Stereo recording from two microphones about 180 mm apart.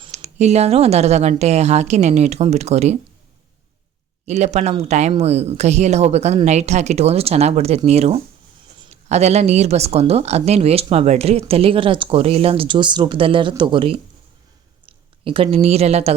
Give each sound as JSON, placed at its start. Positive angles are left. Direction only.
{"t": 0.0, "sound": "speech", "side_deg": -40}
{"t": 4.3, "sound": "a woman's voice", "side_deg": -40}